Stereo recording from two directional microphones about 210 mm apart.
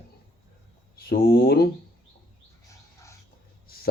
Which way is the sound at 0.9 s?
50° left (ahead or behind).